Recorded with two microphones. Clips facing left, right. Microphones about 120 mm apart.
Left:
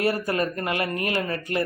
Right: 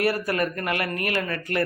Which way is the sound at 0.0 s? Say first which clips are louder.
Even; 25° left (ahead or behind).